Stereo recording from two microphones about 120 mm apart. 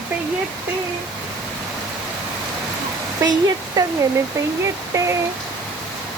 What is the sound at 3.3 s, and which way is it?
Speech, 30° right (ahead or behind).